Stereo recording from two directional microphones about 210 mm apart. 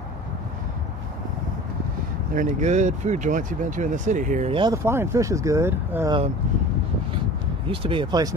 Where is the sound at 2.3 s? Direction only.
35° right (ahead or behind).